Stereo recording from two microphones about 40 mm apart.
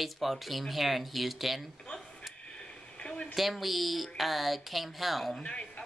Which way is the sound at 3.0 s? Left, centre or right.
Left.